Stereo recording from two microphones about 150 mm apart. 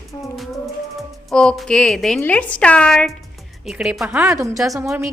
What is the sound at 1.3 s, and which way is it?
A woman's voice, 5° left (ahead or behind).